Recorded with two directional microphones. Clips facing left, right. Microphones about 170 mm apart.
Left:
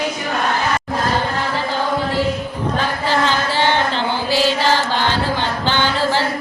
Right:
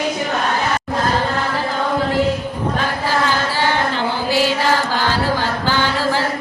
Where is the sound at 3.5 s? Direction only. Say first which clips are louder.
Left 1 dB; 25° left (ahead or behind).